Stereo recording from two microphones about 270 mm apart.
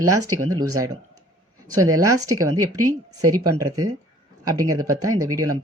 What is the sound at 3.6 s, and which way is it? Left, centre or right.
Speech, centre.